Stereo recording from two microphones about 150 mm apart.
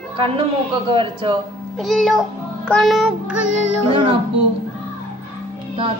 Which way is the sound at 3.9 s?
35° right (ahead or behind).